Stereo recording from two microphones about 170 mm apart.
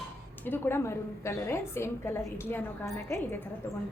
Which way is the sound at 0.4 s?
10° left (ahead or behind).